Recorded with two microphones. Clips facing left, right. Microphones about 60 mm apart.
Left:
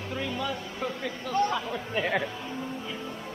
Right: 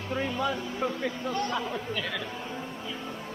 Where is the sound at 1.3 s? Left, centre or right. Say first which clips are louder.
Left 7 dB; left.